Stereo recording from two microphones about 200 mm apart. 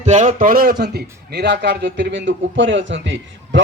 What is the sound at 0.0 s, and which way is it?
A man's voice, 35° right (ahead or behind).